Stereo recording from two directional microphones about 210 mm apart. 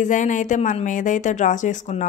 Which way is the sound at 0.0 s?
35° left (ahead or behind).